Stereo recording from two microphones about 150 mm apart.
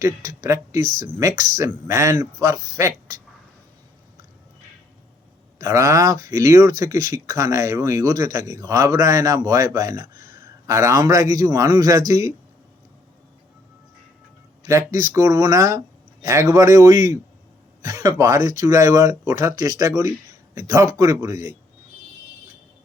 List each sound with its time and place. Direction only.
0.0 s speech: 20° right (ahead or behind)
5.5 s speech: 20° right (ahead or behind)
14.6 s speech: 20° right (ahead or behind)